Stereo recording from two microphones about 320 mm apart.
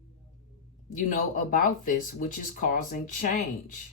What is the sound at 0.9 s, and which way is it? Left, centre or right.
Speech, left.